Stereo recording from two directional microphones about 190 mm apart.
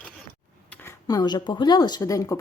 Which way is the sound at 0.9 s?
20° left (ahead or behind).